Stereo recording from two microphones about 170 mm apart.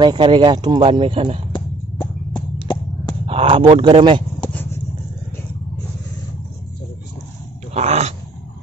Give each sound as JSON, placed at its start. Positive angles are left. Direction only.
{"t": 0.0, "sound": "speech", "side_deg": -25}
{"t": 2.7, "sound": "a sound", "side_deg": 25}
{"t": 3.3, "sound": "speech", "side_deg": -35}
{"t": 4.5, "sound": "vehicle", "side_deg": 10}
{"t": 7.7, "sound": "dog", "side_deg": -40}